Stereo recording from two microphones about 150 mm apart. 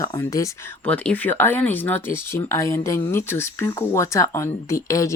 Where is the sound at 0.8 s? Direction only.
10° left (ahead or behind).